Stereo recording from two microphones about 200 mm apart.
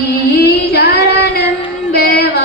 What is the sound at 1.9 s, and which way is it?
Female singing, 50° left (ahead or behind).